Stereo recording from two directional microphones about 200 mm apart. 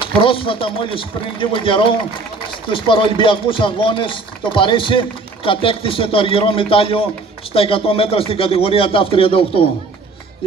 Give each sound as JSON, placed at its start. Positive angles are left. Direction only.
{"t": 0.0, "sound": "speech", "side_deg": 25}